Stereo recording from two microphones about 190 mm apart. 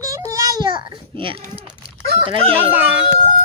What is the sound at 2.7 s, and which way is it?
Speech, 10° right (ahead or behind).